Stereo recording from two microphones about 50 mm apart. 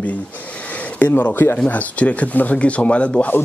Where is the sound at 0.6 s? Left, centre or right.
Left.